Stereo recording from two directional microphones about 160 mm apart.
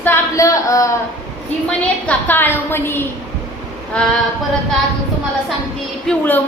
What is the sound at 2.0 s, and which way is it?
A woman's voice, 10° left (ahead or behind).